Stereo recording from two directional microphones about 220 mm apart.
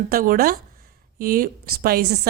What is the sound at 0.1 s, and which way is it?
A woman's voice, 40° right (ahead or behind).